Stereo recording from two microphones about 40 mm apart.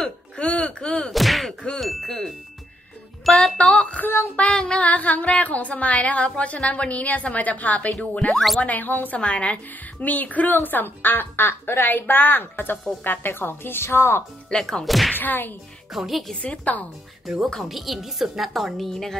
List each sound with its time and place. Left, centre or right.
0.0 s gasp: left
1.1 s a sound: centre
1.8 s music: centre
3.3 s a woman's voice: centre
3.6 s female singing: left
4.0 s whip: left
4.4 s female singing: left
4.8 s a woman's voice: left
9.2 s a woman's voice: left
14.5 s a woman's voice: centre
15.1 s whip: left
15.9 s a woman's voice: centre
16.4 s a woman's voice: left
17.6 s a woman's voice: centre